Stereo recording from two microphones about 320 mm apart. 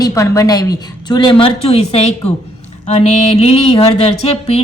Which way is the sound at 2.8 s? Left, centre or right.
Centre.